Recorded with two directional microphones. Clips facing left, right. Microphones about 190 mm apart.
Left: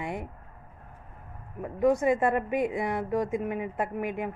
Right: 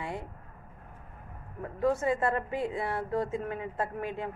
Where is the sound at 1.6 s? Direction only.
15° left (ahead or behind).